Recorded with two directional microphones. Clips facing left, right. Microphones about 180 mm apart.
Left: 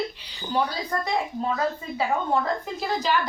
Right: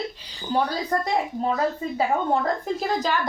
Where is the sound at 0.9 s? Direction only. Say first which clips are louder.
Right 5 dB; 40° right (ahead or behind).